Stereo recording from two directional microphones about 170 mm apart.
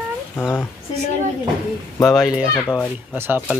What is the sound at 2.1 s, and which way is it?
Speech, 5° right (ahead or behind).